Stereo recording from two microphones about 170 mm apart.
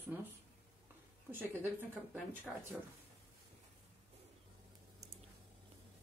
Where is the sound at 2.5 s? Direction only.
5° right (ahead or behind).